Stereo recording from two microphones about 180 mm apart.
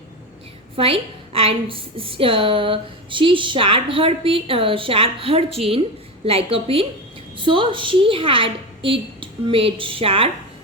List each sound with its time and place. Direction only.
0.8 s a woman's voice: 30° right (ahead or behind)